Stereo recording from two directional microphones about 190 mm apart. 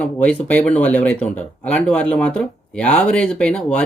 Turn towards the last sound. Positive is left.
turn(degrees=5)  # may be behind; listen again after turning